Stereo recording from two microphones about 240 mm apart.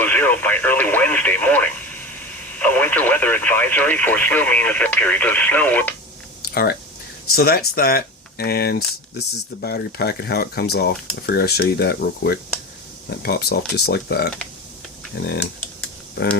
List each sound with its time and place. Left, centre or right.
0.0 s speech: centre
6.4 s a sound: left
7.3 s speech: left